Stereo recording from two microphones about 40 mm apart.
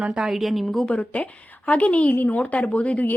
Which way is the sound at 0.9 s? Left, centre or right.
Left.